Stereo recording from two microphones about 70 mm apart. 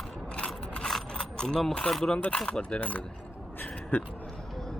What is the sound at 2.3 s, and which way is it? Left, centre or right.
A man's voice, centre.